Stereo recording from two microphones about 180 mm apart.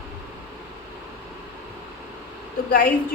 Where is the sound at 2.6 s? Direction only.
55° left (ahead or behind).